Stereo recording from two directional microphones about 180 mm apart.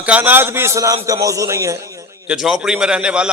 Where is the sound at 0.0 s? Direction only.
10° right (ahead or behind).